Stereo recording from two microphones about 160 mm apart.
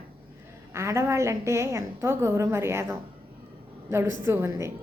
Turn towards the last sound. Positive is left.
turn(degrees=-15)  # may be behind; listen again after turning